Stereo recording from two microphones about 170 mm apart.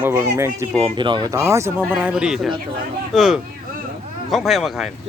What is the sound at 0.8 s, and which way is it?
Speech, 30° right (ahead or behind).